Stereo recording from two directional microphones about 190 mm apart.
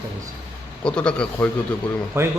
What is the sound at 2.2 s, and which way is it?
Speech, 15° right (ahead or behind).